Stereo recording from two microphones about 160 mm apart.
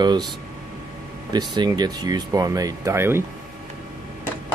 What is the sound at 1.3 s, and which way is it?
Speech, 25° right (ahead or behind).